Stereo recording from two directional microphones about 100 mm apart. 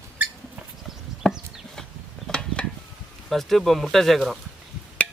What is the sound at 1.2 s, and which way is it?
Chop, 5° left (ahead or behind).